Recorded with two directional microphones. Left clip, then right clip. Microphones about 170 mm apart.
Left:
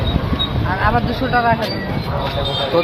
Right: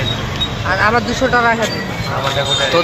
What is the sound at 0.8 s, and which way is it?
Speech, 60° right (ahead or behind).